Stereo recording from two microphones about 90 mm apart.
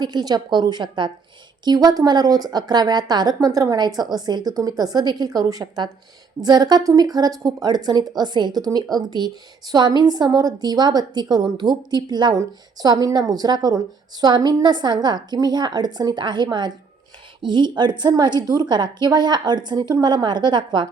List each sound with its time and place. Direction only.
0.0 s a woman's voice: 50° right (ahead or behind)
1.6 s a woman's voice: 50° right (ahead or behind)